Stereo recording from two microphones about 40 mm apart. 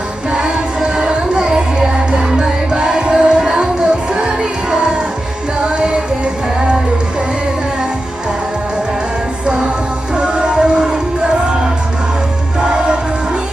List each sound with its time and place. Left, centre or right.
0.3 s music: right
10.2 s music: right
12.5 s music: right